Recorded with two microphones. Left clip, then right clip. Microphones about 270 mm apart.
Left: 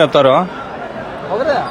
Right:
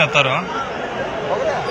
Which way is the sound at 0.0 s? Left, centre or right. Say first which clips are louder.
Left 6 dB; left.